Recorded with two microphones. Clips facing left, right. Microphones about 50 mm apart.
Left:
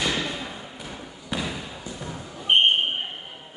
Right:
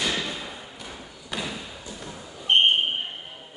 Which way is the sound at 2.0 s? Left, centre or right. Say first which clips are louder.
Left 3 dB; centre.